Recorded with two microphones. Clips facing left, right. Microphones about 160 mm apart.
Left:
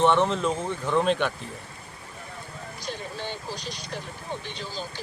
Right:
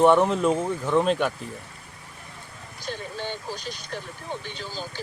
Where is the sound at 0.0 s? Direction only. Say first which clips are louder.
Right 3 dB; 10° right (ahead or behind).